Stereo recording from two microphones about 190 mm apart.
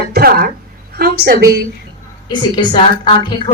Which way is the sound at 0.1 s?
55° right (ahead or behind).